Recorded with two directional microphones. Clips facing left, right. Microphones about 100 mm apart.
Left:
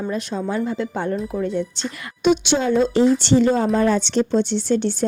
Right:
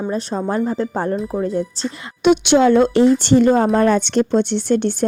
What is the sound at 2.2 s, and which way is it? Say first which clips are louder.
Speech: right 5 dB; 70° right (ahead or behind).